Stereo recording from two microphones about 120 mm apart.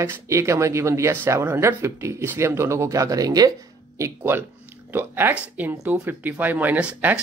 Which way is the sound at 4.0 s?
20° right (ahead or behind).